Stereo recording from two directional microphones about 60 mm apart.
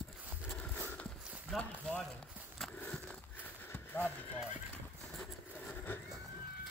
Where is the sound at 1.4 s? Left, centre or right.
Centre.